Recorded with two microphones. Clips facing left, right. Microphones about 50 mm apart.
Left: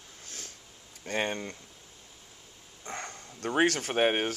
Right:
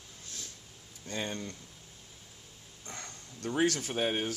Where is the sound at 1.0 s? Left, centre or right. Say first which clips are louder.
Left 6 dB; left.